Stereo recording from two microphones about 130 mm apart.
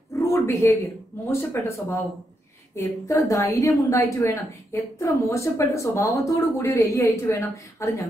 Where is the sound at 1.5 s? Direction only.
20° left (ahead or behind).